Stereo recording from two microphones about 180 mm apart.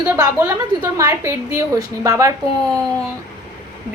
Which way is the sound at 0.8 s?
20° right (ahead or behind).